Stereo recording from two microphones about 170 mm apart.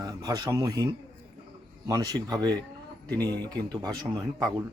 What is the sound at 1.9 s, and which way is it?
Speech, 20° right (ahead or behind).